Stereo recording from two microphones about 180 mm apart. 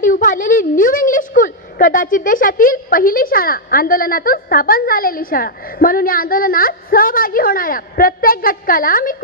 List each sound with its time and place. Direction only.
0.0 s a woman's voice: 45° left (ahead or behind)